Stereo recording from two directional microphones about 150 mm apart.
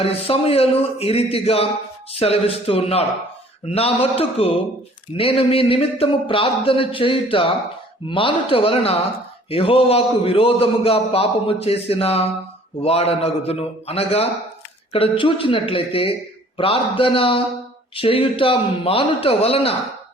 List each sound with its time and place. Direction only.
0.0 s a man's voice: 40° left (ahead or behind)